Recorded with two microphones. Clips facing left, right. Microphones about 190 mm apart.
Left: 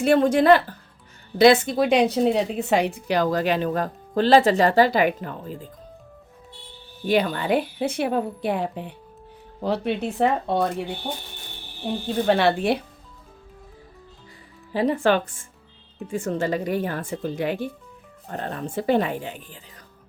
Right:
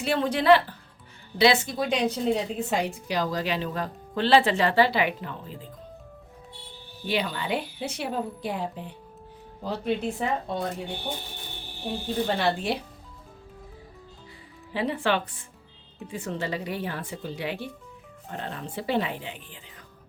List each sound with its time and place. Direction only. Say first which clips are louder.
0.0 s speech: left 7 dB; 50° left (ahead or behind)
7.0 s a woman's voice: left 7 dB; 50° left (ahead or behind); by 10.8 s 70° left (ahead or behind)
12.3 s a woman's voice: left 9 dB; 65° left (ahead or behind)
14.7 s speech: left 6 dB; 40° left (ahead or behind)